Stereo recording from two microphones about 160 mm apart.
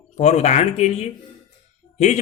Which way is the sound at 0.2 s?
45° left (ahead or behind).